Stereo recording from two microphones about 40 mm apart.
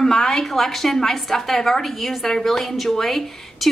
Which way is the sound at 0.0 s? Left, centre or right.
Centre.